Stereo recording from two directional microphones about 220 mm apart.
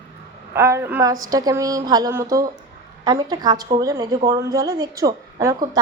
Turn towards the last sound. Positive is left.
turn(degrees=-15)  # may be behind; listen again after turning